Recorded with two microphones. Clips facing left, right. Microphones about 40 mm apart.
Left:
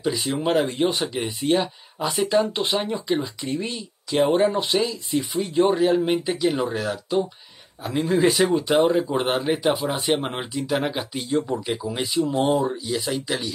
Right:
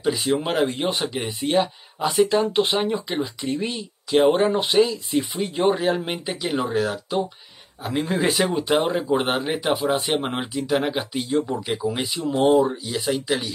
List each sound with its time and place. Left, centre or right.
0.0 s speech: centre
4.1 s speech: centre